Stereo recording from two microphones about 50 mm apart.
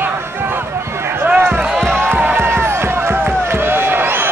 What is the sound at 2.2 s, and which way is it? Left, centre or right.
Music, right.